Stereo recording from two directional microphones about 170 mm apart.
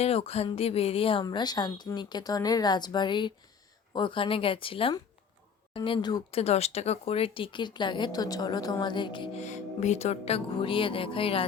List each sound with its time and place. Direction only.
0.0 s a woman's voice: 35° left (ahead or behind)
6.4 s a woman's voice: 40° left (ahead or behind)
9.4 s speech: 40° left (ahead or behind)